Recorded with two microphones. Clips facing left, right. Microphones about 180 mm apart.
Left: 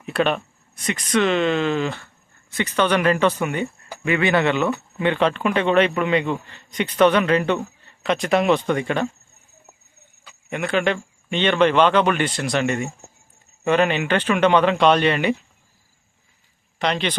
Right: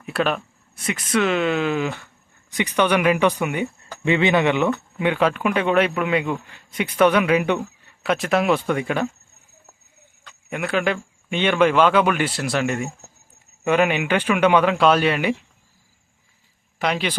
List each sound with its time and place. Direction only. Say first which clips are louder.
0.0 s a man's voice: left 2 dB; centre (ahead or behind)
4.0 s a man's voice: right 1 dB; 25° right (ahead or behind); by 9.0 s 5° right (ahead or behind)
10.2 s a man's voice: left 1 dB; 5° right (ahead or behind)
16.7 s speech: even; 5° right (ahead or behind)